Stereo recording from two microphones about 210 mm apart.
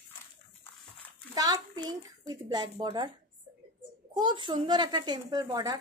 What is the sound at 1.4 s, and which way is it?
A child's voice, 20° right (ahead or behind).